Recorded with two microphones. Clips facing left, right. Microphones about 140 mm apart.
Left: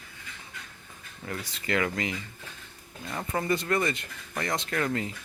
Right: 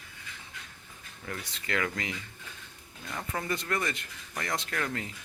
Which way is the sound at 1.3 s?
5° left (ahead or behind).